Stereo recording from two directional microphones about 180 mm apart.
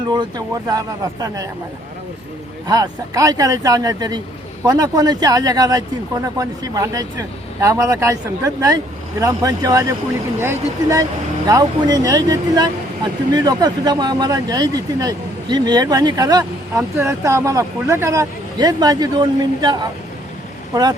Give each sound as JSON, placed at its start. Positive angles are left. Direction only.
{"t": 0.1, "sound": "speech", "side_deg": -20}
{"t": 2.6, "sound": "speech", "side_deg": -20}